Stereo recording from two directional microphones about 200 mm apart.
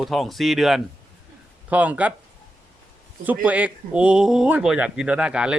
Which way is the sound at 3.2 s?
10° right (ahead or behind).